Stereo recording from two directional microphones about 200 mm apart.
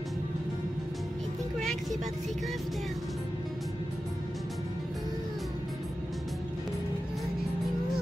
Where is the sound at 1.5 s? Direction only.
5° left (ahead or behind).